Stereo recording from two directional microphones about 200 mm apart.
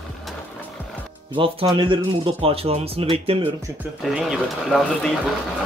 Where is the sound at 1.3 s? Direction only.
25° right (ahead or behind).